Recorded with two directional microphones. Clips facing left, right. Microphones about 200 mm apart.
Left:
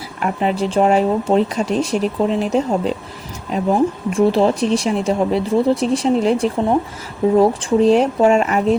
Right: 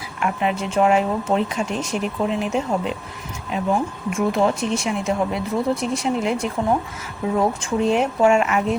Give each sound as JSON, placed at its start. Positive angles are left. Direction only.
{"t": 0.2, "sound": "speech", "side_deg": 35}